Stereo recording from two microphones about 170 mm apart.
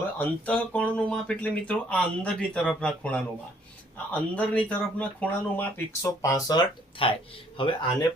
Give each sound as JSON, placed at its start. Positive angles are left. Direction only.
{"t": 0.0, "sound": "speech", "side_deg": 10}